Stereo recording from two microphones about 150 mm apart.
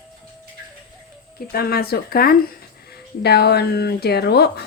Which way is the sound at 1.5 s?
90° left.